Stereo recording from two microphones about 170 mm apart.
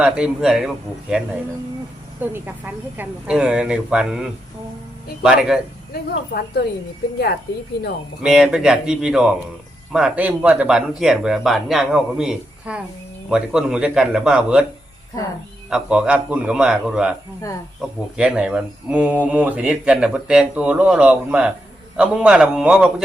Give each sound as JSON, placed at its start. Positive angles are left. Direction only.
{"t": 0.0, "sound": "speech", "side_deg": -5}
{"t": 2.3, "sound": "speech", "side_deg": -10}
{"t": 5.9, "sound": "speech", "side_deg": 70}
{"t": 8.2, "sound": "speech", "side_deg": -5}
{"t": 15.7, "sound": "speech", "side_deg": -5}
{"t": 18.2, "sound": "speech", "side_deg": -5}